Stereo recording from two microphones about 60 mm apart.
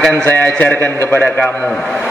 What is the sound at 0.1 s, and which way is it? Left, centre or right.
A man's voice, left.